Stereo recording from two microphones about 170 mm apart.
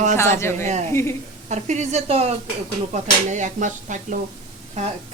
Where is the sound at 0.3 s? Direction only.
15° left (ahead or behind).